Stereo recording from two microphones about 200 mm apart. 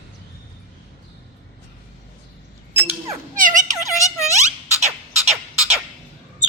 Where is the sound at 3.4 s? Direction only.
40° right (ahead or behind).